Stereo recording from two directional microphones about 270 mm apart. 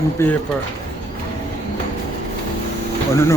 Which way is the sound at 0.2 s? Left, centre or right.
Centre.